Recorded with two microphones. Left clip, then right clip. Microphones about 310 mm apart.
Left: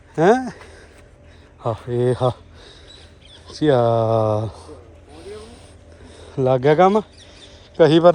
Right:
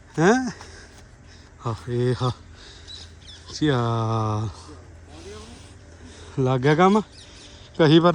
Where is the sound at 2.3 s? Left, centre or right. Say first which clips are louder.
Left 8 dB; centre.